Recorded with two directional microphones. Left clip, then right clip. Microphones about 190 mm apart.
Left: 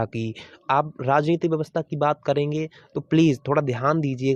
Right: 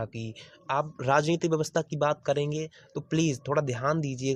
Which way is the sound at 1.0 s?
20° left (ahead or behind).